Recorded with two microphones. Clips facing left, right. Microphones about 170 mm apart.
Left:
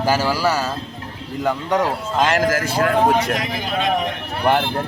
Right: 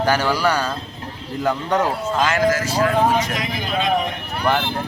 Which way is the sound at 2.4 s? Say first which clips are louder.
Even; 55° left (ahead or behind).